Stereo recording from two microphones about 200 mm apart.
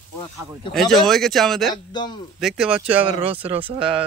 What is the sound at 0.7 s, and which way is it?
A man's voice, centre (ahead or behind).